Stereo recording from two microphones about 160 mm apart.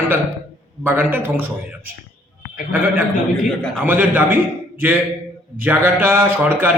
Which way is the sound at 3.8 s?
10° right (ahead or behind).